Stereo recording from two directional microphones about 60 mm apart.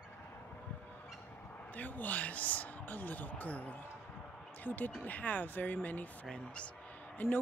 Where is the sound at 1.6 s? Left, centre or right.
Left.